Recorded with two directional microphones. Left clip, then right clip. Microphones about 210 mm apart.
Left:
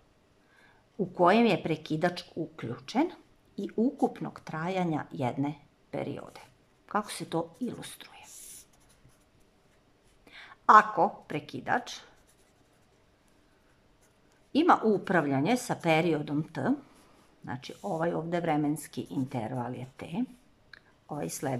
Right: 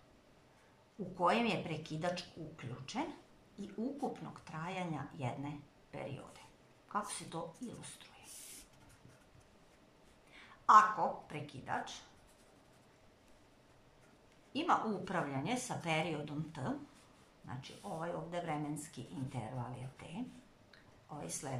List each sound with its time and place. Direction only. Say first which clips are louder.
1.1 s speech: left 10 dB; 45° left (ahead or behind)
10.3 s speech: left 6 dB; 45° left (ahead or behind)
14.5 s speech: left 11 dB; 45° left (ahead or behind)
20.7 s a sound: left 11 dB; 45° left (ahead or behind)